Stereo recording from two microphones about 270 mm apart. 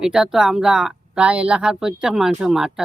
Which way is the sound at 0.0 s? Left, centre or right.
Centre.